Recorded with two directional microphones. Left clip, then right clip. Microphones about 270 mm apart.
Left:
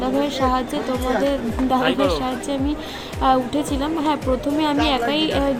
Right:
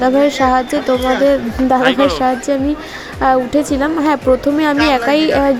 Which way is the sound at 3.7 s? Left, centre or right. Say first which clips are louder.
Right 5 dB; right.